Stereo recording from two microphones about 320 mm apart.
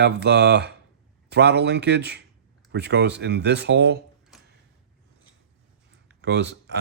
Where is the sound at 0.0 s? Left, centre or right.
Right.